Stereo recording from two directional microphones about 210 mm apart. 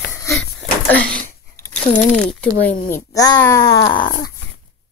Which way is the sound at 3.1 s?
15° left (ahead or behind).